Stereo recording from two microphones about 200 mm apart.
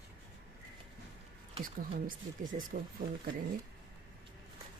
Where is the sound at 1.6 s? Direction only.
45° right (ahead or behind).